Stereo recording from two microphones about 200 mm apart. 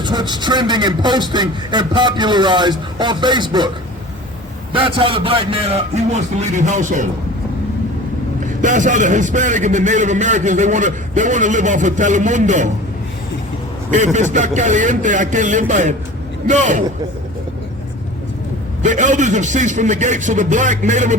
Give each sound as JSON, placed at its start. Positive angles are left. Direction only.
{"t": 0.0, "sound": "a man's voice", "side_deg": -20}
{"t": 4.7, "sound": "a man's voice", "side_deg": -25}
{"t": 8.6, "sound": "a man's voice", "side_deg": -40}
{"t": 13.9, "sound": "a man's voice", "side_deg": -35}
{"t": 18.8, "sound": "a man's voice", "side_deg": -40}